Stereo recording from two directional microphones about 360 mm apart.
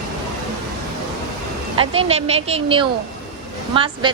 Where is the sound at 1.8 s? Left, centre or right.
Centre.